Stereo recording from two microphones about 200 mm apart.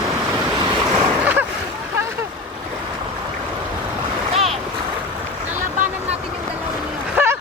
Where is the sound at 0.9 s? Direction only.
10° right (ahead or behind).